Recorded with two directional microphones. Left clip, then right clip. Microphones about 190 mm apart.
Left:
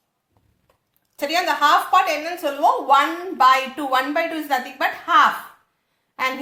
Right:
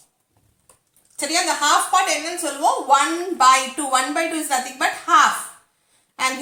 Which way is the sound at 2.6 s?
40° left (ahead or behind).